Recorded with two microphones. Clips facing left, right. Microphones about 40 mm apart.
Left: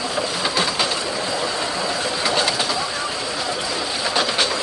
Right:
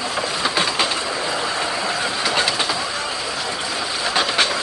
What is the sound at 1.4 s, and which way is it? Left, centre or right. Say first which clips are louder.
Train: right 1 dB; centre.